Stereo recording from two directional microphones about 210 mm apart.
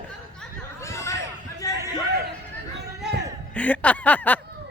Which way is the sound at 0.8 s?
15° left (ahead or behind).